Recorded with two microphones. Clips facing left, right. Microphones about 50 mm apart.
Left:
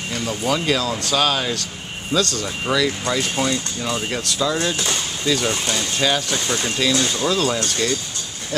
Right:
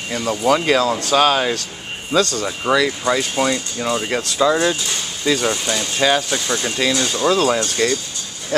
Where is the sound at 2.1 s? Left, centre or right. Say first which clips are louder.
Right 3 dB; centre.